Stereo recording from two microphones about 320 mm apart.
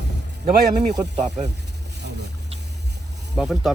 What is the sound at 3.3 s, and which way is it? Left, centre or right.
Speech, centre.